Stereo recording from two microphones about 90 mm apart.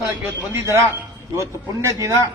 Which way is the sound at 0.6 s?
30° right (ahead or behind).